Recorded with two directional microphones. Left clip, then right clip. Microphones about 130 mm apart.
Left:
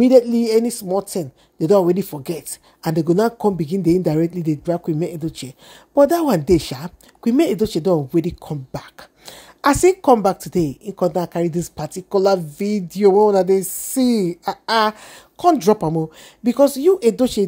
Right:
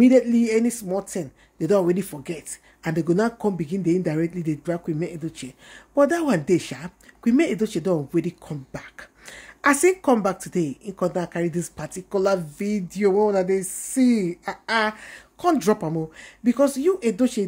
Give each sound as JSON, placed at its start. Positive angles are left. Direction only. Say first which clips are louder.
{"t": 0.0, "sound": "speech", "louder": "left 4 dB", "side_deg": 35}
{"t": 2.2, "sound": "speech", "louder": "left 6 dB", "side_deg": 45}
{"t": 15.4, "sound": "speech", "louder": "left 6 dB", "side_deg": 35}